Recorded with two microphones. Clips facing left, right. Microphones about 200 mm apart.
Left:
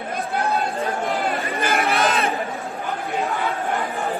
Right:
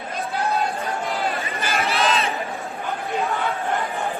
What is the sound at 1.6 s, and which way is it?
Crowd, 55° left (ahead or behind).